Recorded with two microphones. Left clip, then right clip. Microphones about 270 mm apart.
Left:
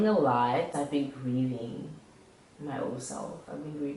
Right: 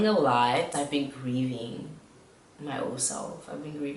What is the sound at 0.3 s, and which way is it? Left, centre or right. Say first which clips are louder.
Speech: right 3 dB; centre.